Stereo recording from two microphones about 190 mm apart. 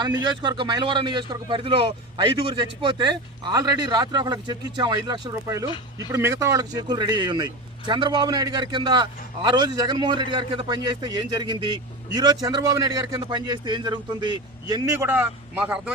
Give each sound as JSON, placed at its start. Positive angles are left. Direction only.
{"t": 0.0, "sound": "speech", "side_deg": -20}